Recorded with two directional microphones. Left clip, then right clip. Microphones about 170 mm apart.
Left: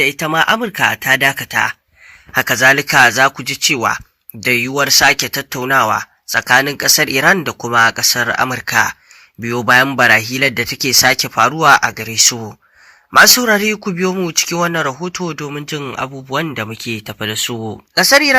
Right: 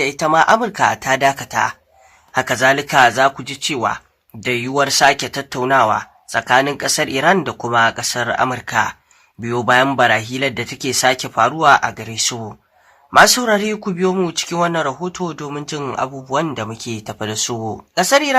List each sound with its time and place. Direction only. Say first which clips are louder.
0.0 s speech: even; 20° left (ahead or behind)